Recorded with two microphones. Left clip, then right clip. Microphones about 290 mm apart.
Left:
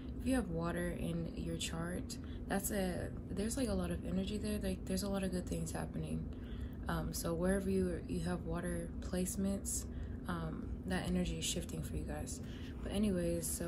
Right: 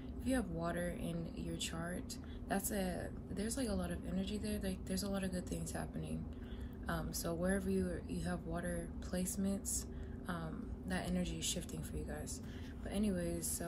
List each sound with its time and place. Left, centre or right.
0.2 s a woman's voice: centre